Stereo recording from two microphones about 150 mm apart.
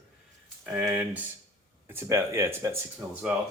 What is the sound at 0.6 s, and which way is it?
Speech, 10° right (ahead or behind).